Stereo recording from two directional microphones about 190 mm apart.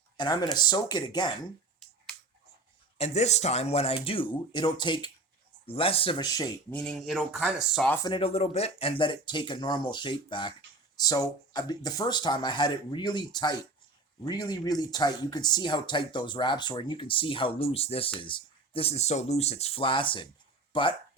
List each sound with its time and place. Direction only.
0.2 s speech: 20° left (ahead or behind)
3.0 s speech: 35° left (ahead or behind)
6.7 s speech: 5° left (ahead or behind)
7.9 s speech: 25° left (ahead or behind)